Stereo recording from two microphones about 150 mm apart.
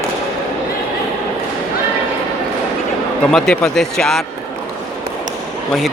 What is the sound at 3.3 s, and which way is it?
Speech, 5° left (ahead or behind).